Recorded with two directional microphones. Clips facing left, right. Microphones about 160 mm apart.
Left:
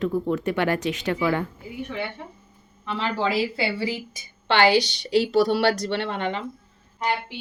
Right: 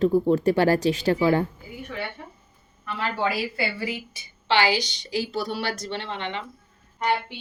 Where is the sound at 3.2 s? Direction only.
25° left (ahead or behind).